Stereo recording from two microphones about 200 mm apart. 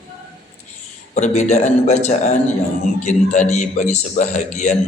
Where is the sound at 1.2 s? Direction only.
35° left (ahead or behind).